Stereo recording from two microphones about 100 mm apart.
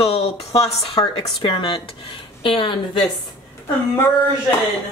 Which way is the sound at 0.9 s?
55° left (ahead or behind).